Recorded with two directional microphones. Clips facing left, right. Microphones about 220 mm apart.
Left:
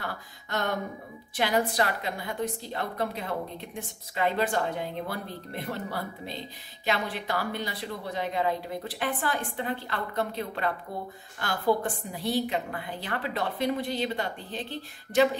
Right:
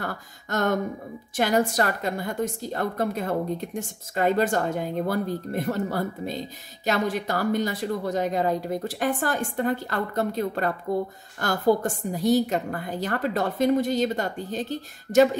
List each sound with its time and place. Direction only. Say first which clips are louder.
0.0 s a woman's voice: right 4 dB; 45° right (ahead or behind)